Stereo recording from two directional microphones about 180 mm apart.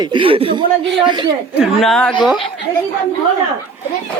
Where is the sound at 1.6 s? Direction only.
Centre (ahead or behind).